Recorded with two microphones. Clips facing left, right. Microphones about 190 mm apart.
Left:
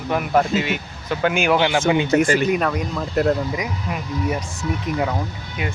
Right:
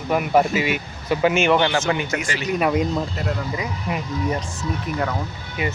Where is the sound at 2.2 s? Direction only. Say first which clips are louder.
Left 10 dB; 50° left (ahead or behind).